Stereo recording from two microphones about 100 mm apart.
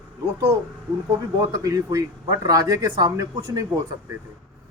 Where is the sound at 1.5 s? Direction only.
35° right (ahead or behind).